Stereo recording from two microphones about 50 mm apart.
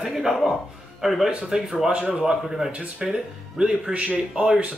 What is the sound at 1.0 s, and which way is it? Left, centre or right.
Speech, centre.